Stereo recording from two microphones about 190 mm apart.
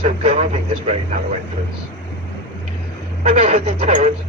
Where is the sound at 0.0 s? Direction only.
30° right (ahead or behind).